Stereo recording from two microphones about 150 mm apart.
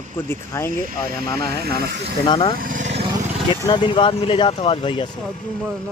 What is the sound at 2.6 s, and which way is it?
Vehicle, 60° right (ahead or behind).